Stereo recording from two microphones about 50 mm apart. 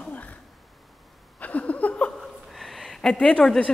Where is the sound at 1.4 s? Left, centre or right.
Left.